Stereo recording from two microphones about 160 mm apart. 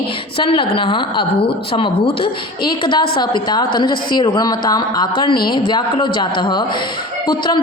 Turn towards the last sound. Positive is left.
turn(degrees=30)  # may be behind; listen again after turning